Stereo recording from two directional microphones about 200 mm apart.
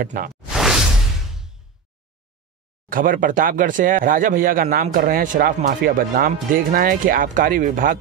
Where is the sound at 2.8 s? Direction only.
45° right (ahead or behind).